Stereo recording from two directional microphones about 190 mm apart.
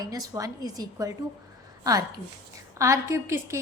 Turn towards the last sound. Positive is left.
turn(degrees=-15)  # may be behind; listen again after turning